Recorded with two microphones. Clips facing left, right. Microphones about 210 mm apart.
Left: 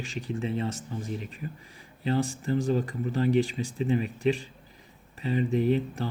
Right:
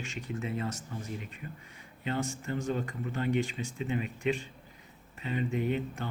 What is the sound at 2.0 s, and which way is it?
Speech, 35° left (ahead or behind).